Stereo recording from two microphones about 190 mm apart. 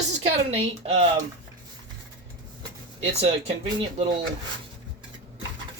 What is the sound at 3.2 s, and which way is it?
Speech, 30° right (ahead or behind).